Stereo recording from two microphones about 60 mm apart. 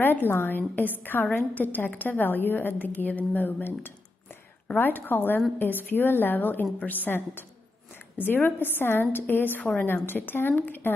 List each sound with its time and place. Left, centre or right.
0.0 s a woman's voice: left
10.0 s a woman's voice: left